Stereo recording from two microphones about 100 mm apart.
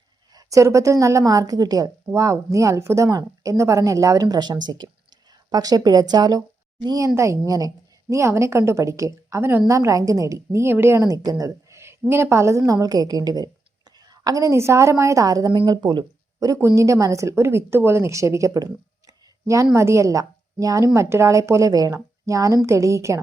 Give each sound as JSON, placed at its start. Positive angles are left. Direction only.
{"t": 0.3, "sound": "a woman's voice", "side_deg": -30}